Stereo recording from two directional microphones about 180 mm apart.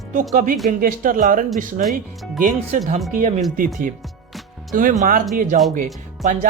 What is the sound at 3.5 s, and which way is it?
Speech, 50° right (ahead or behind).